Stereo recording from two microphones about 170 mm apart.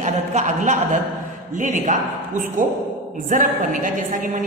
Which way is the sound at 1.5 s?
50° right (ahead or behind).